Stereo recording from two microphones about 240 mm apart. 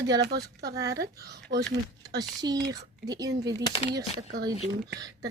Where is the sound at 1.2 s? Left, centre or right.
Right.